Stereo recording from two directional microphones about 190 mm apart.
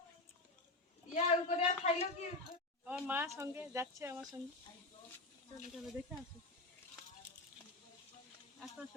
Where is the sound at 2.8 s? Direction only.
5° right (ahead or behind).